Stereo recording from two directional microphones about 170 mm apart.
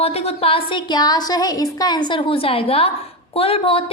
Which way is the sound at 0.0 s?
35° left (ahead or behind).